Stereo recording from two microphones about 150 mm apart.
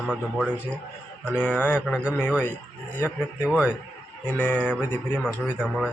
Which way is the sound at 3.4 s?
10° right (ahead or behind).